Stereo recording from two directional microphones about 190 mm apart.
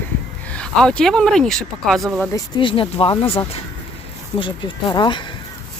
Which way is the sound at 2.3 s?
25° left (ahead or behind).